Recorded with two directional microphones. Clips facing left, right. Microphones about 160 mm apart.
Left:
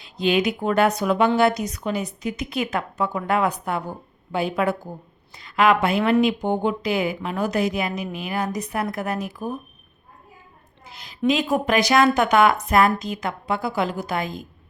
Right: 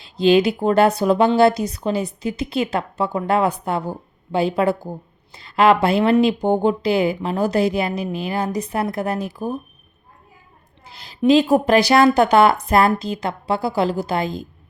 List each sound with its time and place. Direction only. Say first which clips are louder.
0.0 s speech: right 6 dB; 30° right (ahead or behind)
10.8 s a sound: right 1 dB; 30° right (ahead or behind)
11.3 s speech: right 7 dB; 30° right (ahead or behind)